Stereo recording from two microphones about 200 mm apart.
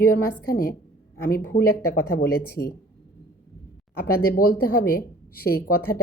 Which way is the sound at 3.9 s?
50° left (ahead or behind).